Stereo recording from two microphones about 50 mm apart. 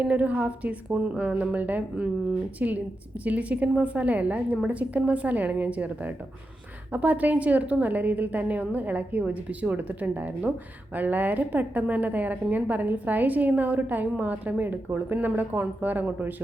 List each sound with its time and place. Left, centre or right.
0.0 s a woman's voice: right